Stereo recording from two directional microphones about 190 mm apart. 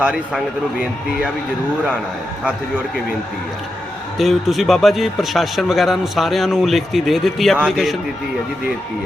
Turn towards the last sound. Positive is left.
turn(degrees=0)  # may be behind; listen again after turning